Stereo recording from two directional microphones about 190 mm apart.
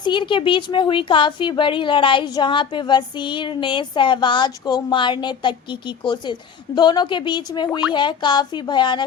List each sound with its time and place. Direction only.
0.0 s a woman's voice: 25° left (ahead or behind)